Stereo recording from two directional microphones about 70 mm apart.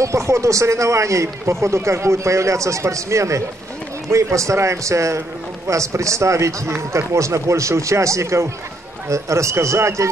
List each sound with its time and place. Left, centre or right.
0.0 s speech: right